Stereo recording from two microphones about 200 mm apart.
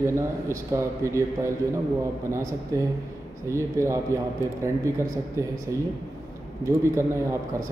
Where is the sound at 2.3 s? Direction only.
15° right (ahead or behind).